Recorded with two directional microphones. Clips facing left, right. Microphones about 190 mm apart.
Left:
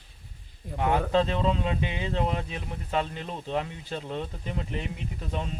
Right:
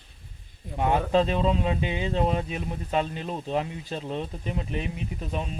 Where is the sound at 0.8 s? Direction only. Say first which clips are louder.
Right 2 dB; 20° right (ahead or behind).